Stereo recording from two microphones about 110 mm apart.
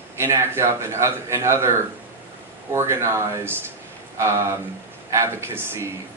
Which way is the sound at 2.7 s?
25° right (ahead or behind).